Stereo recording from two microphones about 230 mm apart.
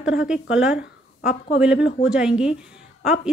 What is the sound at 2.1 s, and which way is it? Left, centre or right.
Speech, centre.